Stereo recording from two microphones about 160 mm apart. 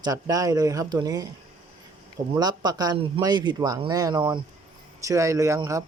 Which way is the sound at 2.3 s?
25° right (ahead or behind).